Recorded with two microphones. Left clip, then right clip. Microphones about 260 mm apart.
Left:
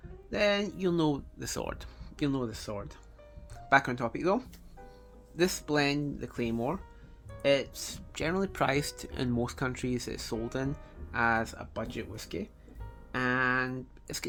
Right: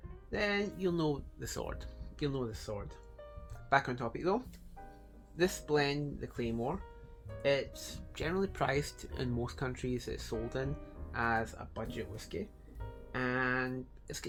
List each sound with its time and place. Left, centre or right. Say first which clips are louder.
0.3 s speech: left 6 dB; left